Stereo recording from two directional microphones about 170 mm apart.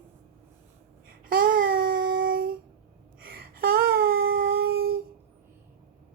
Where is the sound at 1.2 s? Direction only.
55° right (ahead or behind).